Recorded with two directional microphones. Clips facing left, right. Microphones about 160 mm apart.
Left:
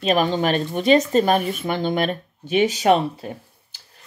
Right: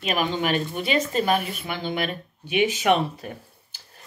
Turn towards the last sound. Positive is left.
turn(degrees=30)  # may be behind; listen again after turning